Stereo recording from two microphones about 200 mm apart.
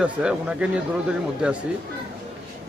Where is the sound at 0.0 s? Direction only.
5° right (ahead or behind).